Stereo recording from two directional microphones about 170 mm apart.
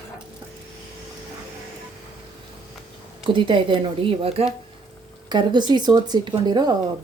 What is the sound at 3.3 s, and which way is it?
Speech, 30° right (ahead or behind).